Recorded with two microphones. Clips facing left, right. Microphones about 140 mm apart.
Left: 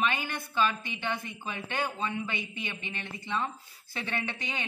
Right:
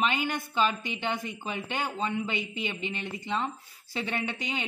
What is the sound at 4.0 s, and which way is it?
Speech, 15° right (ahead or behind).